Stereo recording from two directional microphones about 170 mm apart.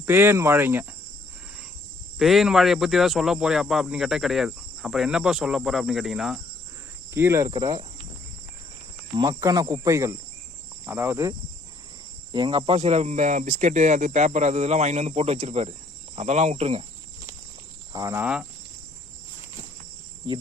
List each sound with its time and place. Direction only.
0.0 s speech: 10° right (ahead or behind)
2.1 s speech: centre (ahead or behind)
7.1 s speech: 15° right (ahead or behind)
9.1 s speech: 20° right (ahead or behind)
12.3 s speech: 30° right (ahead or behind)
17.9 s speech: 15° right (ahead or behind)